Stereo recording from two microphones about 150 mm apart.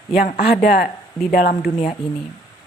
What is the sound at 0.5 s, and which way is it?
Speech, 90° left.